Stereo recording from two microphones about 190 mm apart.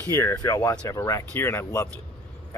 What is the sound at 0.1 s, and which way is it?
Speech, 15° left (ahead or behind).